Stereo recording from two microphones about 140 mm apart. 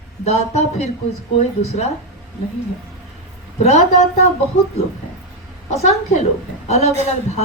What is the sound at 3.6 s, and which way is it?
Speech, 55° left (ahead or behind).